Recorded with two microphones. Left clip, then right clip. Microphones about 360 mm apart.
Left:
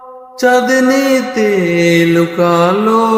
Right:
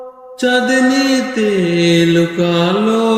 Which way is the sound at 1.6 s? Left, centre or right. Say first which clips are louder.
Left 2 dB; left.